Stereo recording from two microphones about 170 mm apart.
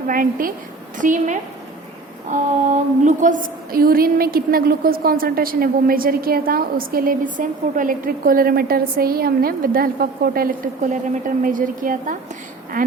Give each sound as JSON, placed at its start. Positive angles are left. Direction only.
{"t": 0.1, "sound": "a woman's voice", "side_deg": -55}
{"t": 2.3, "sound": "a sound", "side_deg": -45}
{"t": 11.4, "sound": "a woman's voice", "side_deg": -55}